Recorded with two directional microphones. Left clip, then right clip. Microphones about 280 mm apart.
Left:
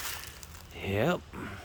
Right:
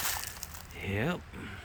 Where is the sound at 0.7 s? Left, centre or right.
Centre.